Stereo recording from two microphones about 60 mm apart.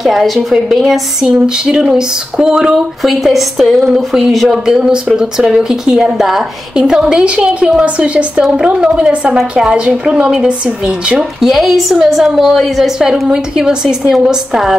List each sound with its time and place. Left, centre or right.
0.0 s a woman's voice: centre
3.0 s a woman's voice: centre
11.4 s a woman's voice: centre